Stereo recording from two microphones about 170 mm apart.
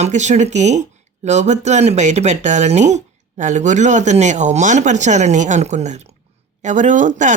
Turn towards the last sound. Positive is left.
turn(degrees=-45)  # may be behind; listen again after turning